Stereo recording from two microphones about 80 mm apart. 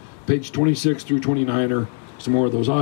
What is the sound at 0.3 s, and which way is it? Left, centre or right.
Speech, left.